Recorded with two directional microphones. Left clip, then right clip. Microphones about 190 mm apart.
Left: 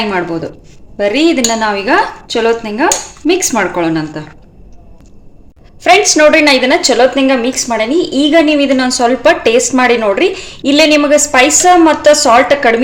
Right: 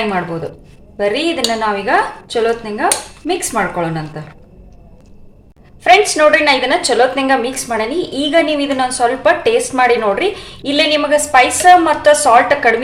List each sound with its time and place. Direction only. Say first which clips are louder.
0.9 s a woman's voice: left 5 dB; 35° left (ahead or behind)
6.1 s a woman's voice: left 4 dB; 35° left (ahead or behind)